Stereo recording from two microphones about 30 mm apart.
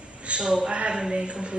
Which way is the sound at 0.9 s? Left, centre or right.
Right.